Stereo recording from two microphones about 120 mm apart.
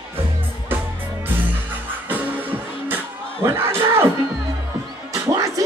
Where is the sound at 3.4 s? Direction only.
20° right (ahead or behind).